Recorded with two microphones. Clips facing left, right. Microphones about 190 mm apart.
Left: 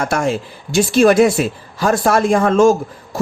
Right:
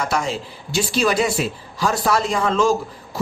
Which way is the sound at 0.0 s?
50° left (ahead or behind).